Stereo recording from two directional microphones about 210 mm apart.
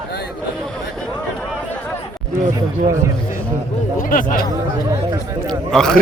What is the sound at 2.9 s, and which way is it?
Speech, 15° right (ahead or behind).